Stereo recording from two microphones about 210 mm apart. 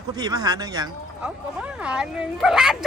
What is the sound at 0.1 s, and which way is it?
Speech, 15° right (ahead or behind).